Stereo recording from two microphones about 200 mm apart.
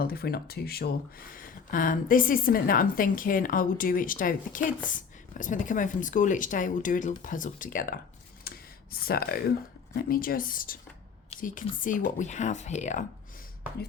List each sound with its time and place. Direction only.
0.0 s speech: 50° left (ahead or behind)
8.4 s a sound: 50° left (ahead or behind)
9.9 s speech: 45° left (ahead or behind)